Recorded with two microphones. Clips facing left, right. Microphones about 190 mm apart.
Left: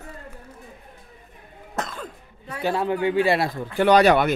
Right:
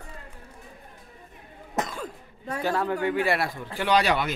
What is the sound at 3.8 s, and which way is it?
Speech, 50° left (ahead or behind).